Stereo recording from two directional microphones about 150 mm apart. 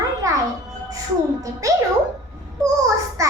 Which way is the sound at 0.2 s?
25° right (ahead or behind).